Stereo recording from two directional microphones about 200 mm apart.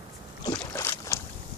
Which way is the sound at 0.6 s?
10° left (ahead or behind).